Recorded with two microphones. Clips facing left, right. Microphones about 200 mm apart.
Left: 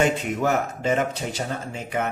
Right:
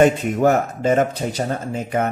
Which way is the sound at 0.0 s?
45° right (ahead or behind).